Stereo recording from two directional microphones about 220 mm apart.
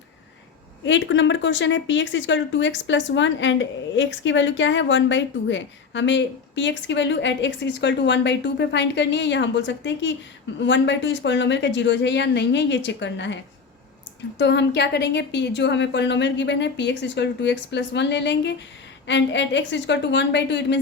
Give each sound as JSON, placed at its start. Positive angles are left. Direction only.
{"t": 0.9, "sound": "a woman's voice", "side_deg": 55}